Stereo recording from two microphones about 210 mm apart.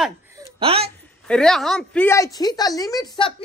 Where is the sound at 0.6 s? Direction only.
25° right (ahead or behind).